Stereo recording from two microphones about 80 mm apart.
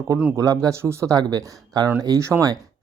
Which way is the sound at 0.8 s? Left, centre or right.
Right.